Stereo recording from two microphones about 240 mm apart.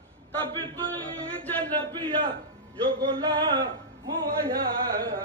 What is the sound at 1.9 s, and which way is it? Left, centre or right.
Speech, right.